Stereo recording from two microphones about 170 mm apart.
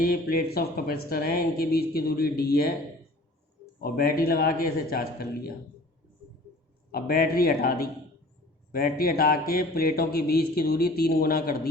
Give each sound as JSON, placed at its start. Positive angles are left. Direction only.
{"t": 0.0, "sound": "speech", "side_deg": 60}
{"t": 3.8, "sound": "speech", "side_deg": 60}
{"t": 6.9, "sound": "speech", "side_deg": 60}